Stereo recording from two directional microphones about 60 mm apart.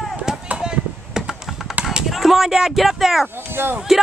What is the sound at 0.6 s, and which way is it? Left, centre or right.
Typing, centre.